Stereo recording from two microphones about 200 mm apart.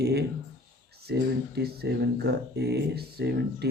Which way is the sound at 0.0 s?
55° right (ahead or behind).